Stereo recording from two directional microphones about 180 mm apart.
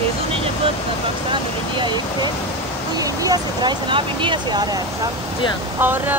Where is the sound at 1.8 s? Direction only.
25° right (ahead or behind).